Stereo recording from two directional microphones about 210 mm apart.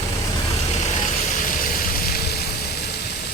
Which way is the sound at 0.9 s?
35° left (ahead or behind).